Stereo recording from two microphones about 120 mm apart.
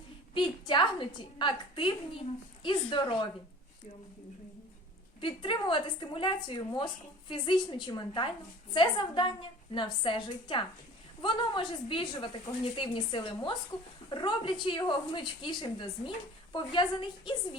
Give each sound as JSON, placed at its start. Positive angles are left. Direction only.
{"t": 0.3, "sound": "a sound", "side_deg": 45}
{"t": 2.6, "sound": "a woman's voice", "side_deg": 40}
{"t": 5.2, "sound": "a woman's voice", "side_deg": 45}